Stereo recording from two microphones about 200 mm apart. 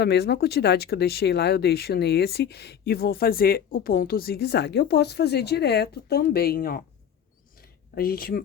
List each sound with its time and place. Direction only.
0.0 s speech: 55° left (ahead or behind)
7.9 s speech: 50° left (ahead or behind)